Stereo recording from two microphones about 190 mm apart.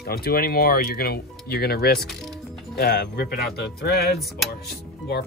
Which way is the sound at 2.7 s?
60° left (ahead or behind).